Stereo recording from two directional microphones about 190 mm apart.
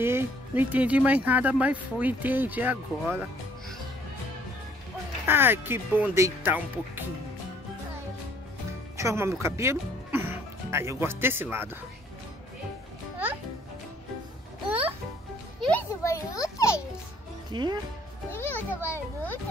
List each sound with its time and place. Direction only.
0.0 s speech: 10° right (ahead or behind)
5.2 s speech: 10° right (ahead or behind)
8.9 s speech: 15° right (ahead or behind)
15.7 s children playing: 15° left (ahead or behind)
17.5 s speech: 20° right (ahead or behind)
18.3 s a child's voice: 10° left (ahead or behind)